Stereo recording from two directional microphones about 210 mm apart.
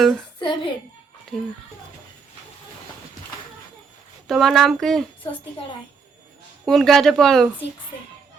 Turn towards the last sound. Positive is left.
turn(degrees=0)  # may be behind; listen again after turning